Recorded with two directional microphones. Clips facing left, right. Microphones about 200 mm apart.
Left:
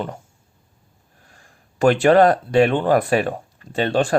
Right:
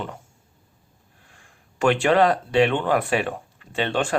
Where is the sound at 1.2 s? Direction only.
40° left (ahead or behind).